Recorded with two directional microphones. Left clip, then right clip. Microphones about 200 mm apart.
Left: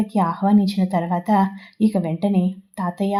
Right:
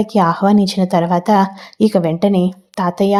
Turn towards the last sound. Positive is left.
turn(degrees=-25)  # may be behind; listen again after turning